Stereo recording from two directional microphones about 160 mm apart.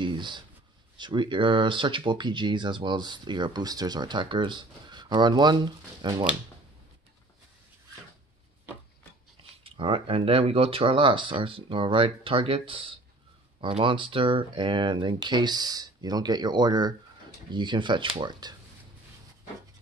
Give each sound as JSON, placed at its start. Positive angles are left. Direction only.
{"t": 0.0, "sound": "a sound", "side_deg": -30}
{"t": 0.9, "sound": "speech", "side_deg": -30}
{"t": 9.4, "sound": "speech", "side_deg": -35}